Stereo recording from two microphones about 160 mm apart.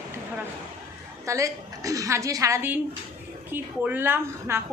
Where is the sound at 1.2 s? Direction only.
20° right (ahead or behind).